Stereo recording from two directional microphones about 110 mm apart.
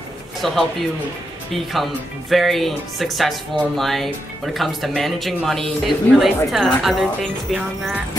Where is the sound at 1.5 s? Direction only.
Centre (ahead or behind).